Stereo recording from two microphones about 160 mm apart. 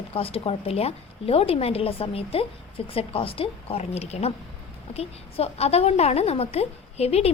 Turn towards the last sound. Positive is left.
turn(degrees=40)  # may be behind; listen again after turning